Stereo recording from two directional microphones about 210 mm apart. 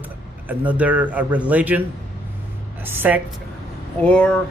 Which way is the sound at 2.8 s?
10° right (ahead or behind).